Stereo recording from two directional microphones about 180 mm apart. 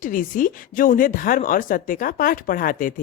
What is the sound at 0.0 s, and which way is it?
Speech, 50° left (ahead or behind).